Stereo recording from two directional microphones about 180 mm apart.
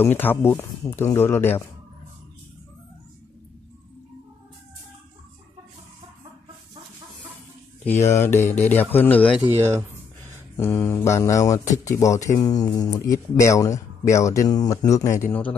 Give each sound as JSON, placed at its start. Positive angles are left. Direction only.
{"t": 0.0, "sound": "speech", "side_deg": 10}
{"t": 7.8, "sound": "speech", "side_deg": 10}
{"t": 9.6, "sound": "speech", "side_deg": -15}
{"t": 10.5, "sound": "speech", "side_deg": 15}